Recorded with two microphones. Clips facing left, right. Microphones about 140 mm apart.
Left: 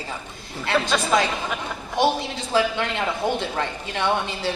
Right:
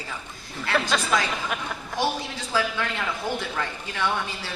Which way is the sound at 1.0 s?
25° left (ahead or behind).